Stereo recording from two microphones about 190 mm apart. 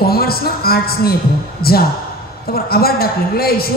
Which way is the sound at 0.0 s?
55° left (ahead or behind).